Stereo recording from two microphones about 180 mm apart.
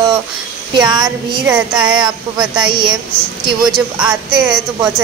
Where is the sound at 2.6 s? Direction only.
25° right (ahead or behind).